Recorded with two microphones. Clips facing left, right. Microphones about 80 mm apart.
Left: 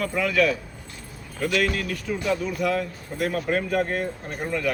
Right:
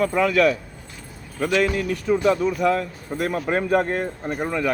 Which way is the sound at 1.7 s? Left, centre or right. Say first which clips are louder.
Right 6 dB; right.